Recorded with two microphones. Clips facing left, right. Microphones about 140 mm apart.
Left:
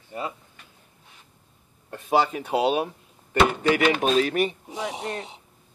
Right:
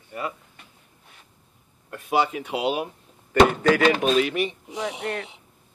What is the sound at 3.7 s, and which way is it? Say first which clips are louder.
Speech: right 2 dB; 35° right (ahead or behind).